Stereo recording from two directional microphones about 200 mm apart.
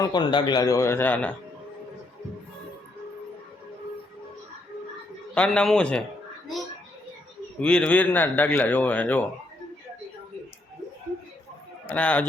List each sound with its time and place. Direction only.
0.0 s a man's voice: 20° left (ahead or behind)
5.3 s a man's voice: 5° left (ahead or behind)
7.6 s a man's voice: 5° left (ahead or behind)
11.9 s a man's voice: 5° left (ahead or behind)